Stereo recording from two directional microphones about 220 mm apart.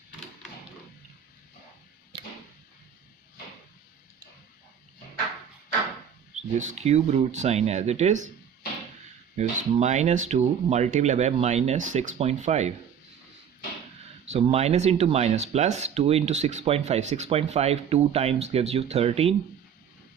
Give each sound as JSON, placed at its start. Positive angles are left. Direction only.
{"t": 6.3, "sound": "speech", "side_deg": -30}
{"t": 9.4, "sound": "speech", "side_deg": -30}
{"t": 14.3, "sound": "speech", "side_deg": -25}